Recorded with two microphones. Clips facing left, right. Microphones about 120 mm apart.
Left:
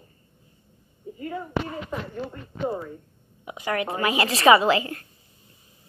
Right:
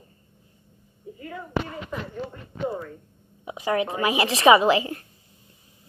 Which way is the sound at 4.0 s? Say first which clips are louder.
Right 1 dB; 15° right (ahead or behind).